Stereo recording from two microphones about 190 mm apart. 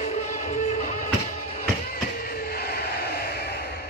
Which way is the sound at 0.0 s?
35° left (ahead or behind).